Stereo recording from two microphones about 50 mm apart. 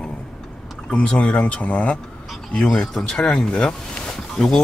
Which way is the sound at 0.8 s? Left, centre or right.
Left.